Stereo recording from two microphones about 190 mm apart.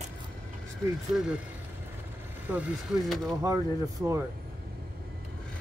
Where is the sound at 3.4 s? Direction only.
15° right (ahead or behind).